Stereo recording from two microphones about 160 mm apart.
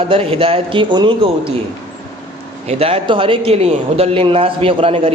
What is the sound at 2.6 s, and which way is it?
A man's voice, 40° right (ahead or behind).